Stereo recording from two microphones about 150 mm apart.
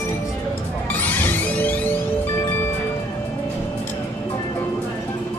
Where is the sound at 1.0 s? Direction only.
10° left (ahead or behind).